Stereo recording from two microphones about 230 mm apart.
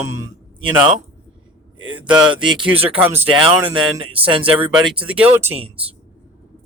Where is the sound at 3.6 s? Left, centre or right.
Right.